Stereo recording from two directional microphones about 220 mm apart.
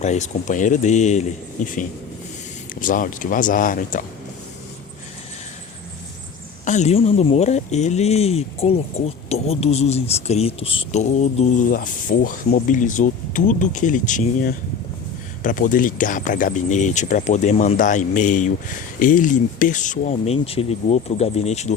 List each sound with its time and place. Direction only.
0.0 s speech: 30° left (ahead or behind)
6.7 s speech: 30° left (ahead or behind)